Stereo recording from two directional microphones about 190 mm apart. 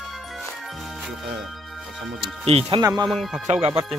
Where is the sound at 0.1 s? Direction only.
Centre (ahead or behind).